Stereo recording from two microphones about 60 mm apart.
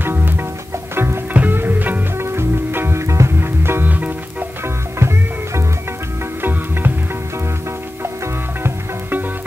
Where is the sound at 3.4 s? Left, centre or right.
Right.